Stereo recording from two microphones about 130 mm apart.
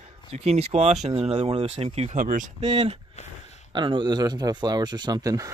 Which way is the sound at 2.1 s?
90° right.